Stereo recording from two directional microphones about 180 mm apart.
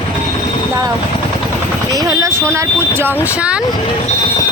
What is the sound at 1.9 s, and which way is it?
Speech, 20° right (ahead or behind).